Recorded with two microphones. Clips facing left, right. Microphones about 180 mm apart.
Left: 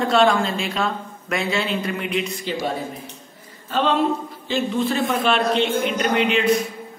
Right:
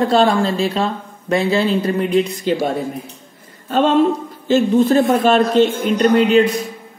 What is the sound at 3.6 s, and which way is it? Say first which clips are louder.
A man's voice: right 6 dB; 45° right (ahead or behind).